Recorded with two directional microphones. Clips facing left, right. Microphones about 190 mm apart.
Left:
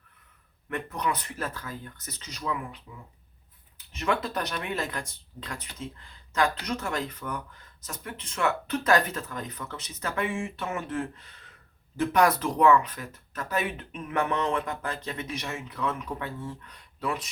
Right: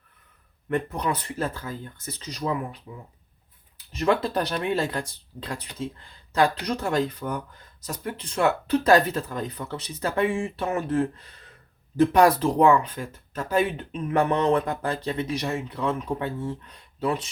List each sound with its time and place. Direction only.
0.7 s speech: 30° right (ahead or behind)
3.9 s speech: 35° right (ahead or behind)